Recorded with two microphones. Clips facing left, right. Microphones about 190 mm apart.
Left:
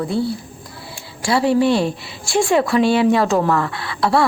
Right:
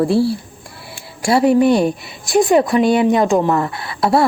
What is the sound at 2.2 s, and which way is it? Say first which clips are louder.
Speech: right 4 dB; 20° right (ahead or behind).